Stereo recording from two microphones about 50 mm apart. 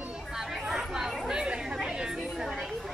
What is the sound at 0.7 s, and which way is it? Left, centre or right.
Chatter, centre.